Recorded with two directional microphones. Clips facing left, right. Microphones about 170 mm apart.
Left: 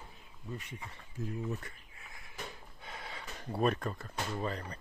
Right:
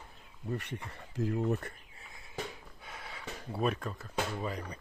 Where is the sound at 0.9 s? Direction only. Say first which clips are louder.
Right 7 dB; 75° right (ahead or behind).